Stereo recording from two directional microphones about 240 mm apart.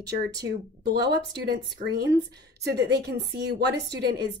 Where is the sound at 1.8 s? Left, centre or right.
Right.